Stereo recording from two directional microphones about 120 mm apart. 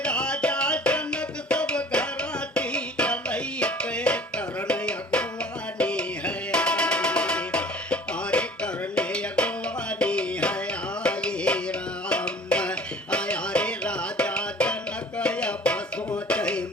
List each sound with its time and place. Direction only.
0.0 s music: 10° left (ahead or behind)